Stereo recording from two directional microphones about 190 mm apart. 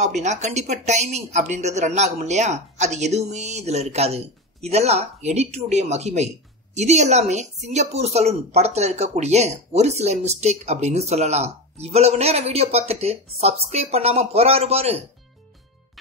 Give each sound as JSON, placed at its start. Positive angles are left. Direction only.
{"t": 0.0, "sound": "speech", "side_deg": -40}